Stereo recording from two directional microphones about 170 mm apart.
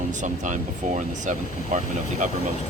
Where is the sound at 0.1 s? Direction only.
45° right (ahead or behind).